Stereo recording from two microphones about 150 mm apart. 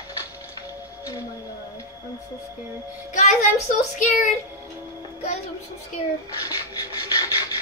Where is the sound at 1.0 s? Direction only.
25° left (ahead or behind).